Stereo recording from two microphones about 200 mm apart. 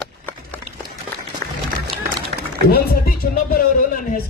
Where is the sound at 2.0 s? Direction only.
50° right (ahead or behind).